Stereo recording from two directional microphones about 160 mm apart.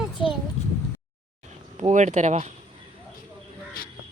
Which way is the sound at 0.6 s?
45° left (ahead or behind).